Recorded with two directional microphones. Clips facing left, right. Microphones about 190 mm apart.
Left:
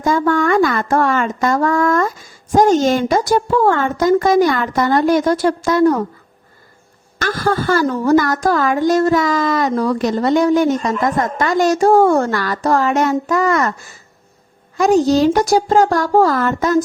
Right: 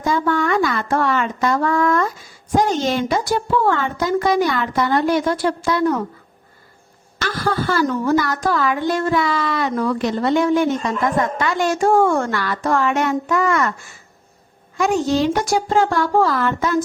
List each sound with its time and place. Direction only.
0.0 s speech: 45° left (ahead or behind)
7.2 s a woman's voice: 45° left (ahead or behind)